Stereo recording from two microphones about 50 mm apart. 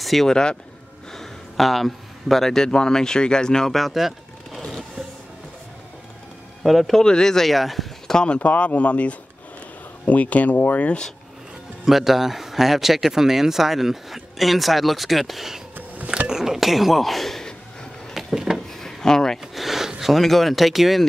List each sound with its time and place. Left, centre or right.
0.0 s speech: centre
0.3 s speech: centre
1.1 s a man's voice: centre
3.7 s vehicle: centre
6.6 s speech: centre
7.0 s speech: centre
8.1 s speech: centre
8.4 s speech: left
11.8 s speech: centre
18.1 s a sound: centre
18.7 s a sound: centre
19.4 s a sound: centre